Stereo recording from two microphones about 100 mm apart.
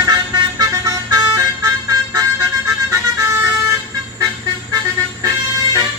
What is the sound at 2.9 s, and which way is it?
Vehicle, 30° right (ahead or behind).